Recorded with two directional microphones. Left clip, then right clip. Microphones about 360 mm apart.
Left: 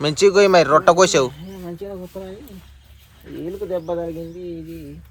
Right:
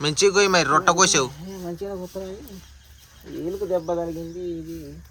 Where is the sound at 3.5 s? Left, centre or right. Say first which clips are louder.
Even; centre.